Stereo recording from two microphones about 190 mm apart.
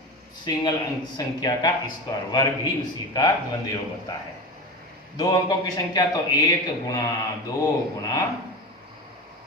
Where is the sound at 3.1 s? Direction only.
20° left (ahead or behind).